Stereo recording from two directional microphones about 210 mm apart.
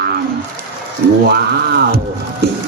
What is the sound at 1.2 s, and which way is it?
Speech, 50° right (ahead or behind).